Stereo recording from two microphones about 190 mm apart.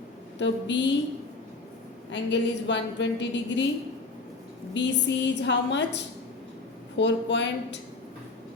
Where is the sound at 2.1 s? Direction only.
70° left (ahead or behind).